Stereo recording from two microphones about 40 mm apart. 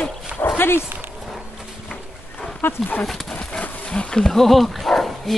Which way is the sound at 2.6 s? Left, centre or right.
Left.